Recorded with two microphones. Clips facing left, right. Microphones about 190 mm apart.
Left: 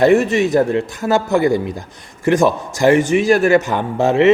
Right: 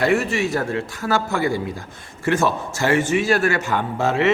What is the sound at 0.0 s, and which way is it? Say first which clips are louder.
A man's voice: left 7 dB; 20° left (ahead or behind).